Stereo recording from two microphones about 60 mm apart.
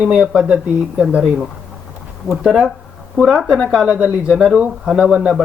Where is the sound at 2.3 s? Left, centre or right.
Centre.